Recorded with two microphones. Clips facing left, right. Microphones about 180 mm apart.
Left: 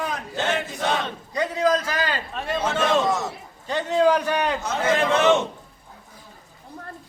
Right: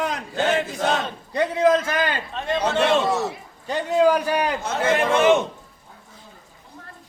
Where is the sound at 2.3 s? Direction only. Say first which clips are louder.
Right 3 dB; 5° left (ahead or behind).